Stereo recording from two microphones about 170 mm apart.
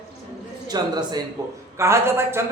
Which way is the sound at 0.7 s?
25° right (ahead or behind).